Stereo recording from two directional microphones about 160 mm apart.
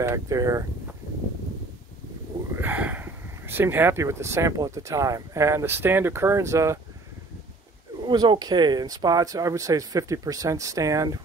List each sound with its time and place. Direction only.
0.0 s speech: 20° right (ahead or behind)
2.5 s speech: 10° right (ahead or behind)
8.1 s speech: 25° right (ahead or behind)